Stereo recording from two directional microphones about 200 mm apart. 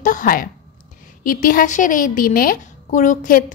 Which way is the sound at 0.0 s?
40° left (ahead or behind).